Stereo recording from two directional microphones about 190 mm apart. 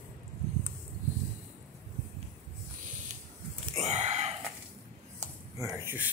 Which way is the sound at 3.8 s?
35° right (ahead or behind).